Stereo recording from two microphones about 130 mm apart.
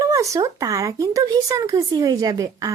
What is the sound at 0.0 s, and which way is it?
Speech, 25° right (ahead or behind).